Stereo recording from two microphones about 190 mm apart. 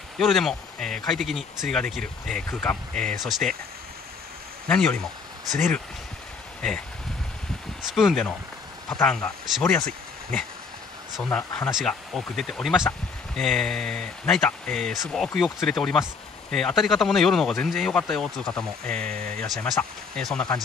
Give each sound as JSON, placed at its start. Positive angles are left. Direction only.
{"t": 0.2, "sound": "speech", "side_deg": 0}
{"t": 2.9, "sound": "speech", "side_deg": -40}
{"t": 3.2, "sound": "speech", "side_deg": 0}
{"t": 4.6, "sound": "speech", "side_deg": 5}
{"t": 5.5, "sound": "speech", "side_deg": -40}
{"t": 7.9, "sound": "speech", "side_deg": 0}
{"t": 11.2, "sound": "speech", "side_deg": 10}
{"t": 18.9, "sound": "speech", "side_deg": -50}
{"t": 19.4, "sound": "speech", "side_deg": 0}